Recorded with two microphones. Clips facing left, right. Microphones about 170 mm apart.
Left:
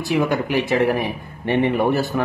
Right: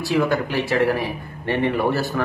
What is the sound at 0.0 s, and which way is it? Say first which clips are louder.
A man's voice: even; 20° left (ahead or behind).